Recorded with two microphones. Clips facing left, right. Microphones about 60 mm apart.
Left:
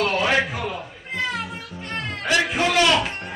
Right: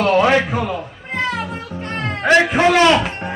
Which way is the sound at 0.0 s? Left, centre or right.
Right.